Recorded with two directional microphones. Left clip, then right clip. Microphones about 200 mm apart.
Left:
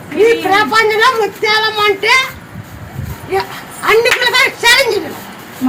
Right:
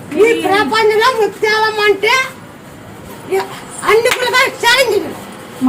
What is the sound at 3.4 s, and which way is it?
A woman's voice, 25° right (ahead or behind).